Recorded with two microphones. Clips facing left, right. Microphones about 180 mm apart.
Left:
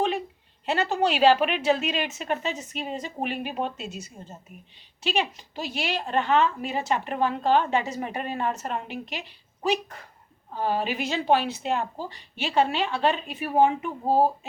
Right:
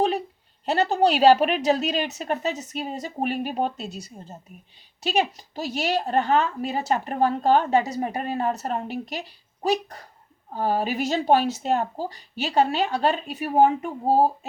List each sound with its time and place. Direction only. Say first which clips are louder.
0.6 s a woman's voice: right 4 dB; 40° right (ahead or behind)